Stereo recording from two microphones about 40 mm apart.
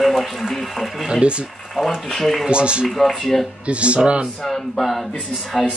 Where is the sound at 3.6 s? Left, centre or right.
Right.